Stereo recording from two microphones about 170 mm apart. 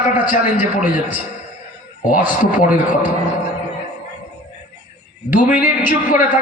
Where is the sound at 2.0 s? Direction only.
50° left (ahead or behind).